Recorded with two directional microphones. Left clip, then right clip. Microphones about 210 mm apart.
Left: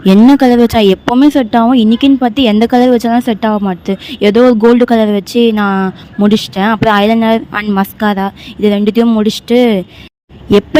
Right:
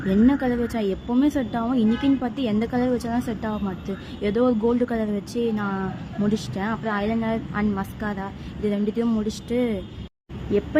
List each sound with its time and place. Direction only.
0.1 s speech: 45° left (ahead or behind)